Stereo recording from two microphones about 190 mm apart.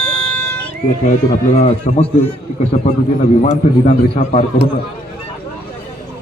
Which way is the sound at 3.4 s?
35° left (ahead or behind).